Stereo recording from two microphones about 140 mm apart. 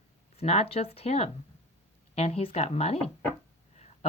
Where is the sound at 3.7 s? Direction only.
55° left (ahead or behind).